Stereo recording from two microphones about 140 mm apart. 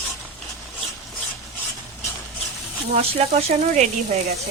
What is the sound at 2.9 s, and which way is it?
Speech, 50° right (ahead or behind).